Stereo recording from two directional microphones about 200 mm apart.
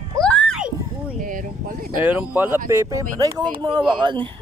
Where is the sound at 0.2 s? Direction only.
5° left (ahead or behind).